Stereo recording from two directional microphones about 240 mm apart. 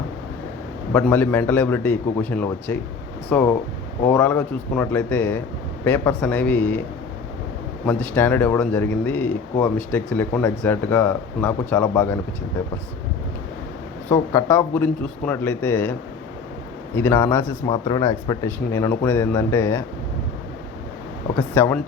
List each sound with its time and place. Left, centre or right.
0.9 s speech: centre
7.9 s speech: centre
14.1 s speech: centre
21.3 s speech: centre